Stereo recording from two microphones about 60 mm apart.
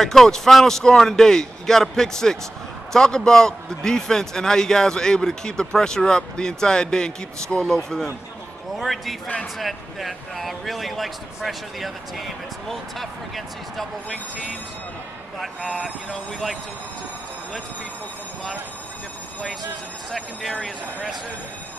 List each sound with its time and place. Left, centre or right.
0.0 s a man's voice: centre
16.1 s speech: centre